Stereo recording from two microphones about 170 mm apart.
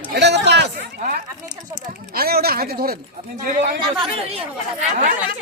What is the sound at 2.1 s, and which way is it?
Speech, 65° right (ahead or behind).